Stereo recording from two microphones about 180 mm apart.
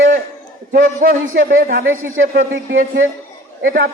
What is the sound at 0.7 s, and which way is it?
A man's voice, 55° right (ahead or behind).